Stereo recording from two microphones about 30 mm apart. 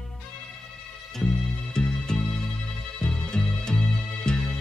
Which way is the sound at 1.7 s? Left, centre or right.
Left.